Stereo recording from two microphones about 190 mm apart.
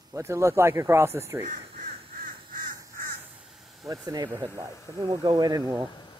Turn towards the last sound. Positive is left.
turn(degrees=-15)  # may be behind; listen again after turning